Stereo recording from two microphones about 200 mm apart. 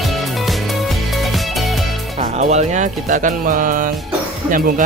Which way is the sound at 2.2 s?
35° right (ahead or behind).